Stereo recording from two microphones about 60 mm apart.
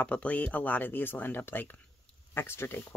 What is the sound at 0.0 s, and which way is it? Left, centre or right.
Speech, left.